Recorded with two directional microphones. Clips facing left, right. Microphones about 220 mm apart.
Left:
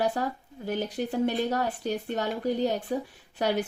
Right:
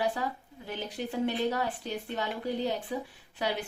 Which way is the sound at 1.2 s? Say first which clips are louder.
Left 2 dB; 45° left (ahead or behind).